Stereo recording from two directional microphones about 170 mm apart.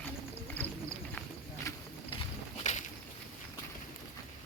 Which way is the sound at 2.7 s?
45° left (ahead or behind).